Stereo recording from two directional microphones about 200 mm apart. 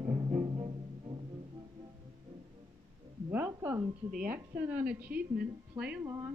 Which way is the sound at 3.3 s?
10° right (ahead or behind).